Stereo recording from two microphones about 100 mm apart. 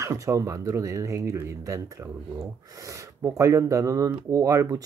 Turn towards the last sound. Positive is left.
turn(degrees=-35)  # may be behind; listen again after turning